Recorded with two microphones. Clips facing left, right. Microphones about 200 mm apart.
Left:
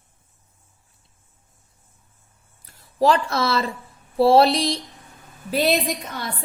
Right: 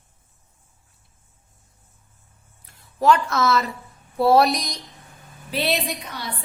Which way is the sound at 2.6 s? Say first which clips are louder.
Even; 35° left (ahead or behind).